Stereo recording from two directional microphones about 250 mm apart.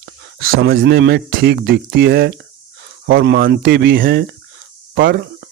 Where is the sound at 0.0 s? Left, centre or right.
Right.